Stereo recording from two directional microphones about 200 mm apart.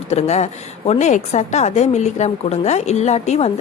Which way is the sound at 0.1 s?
35° left (ahead or behind).